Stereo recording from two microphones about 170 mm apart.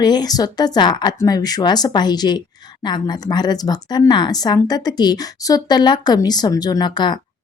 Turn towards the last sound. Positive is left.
turn(degrees=25)  # may be behind; listen again after turning